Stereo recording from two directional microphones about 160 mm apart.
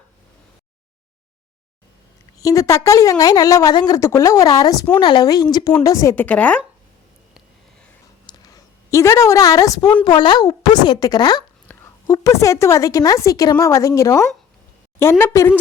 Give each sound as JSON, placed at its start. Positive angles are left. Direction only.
{"t": 2.4, "sound": "a woman's voice", "side_deg": 20}
{"t": 8.3, "sound": "a sound", "side_deg": 25}
{"t": 8.9, "sound": "a woman's voice", "side_deg": 20}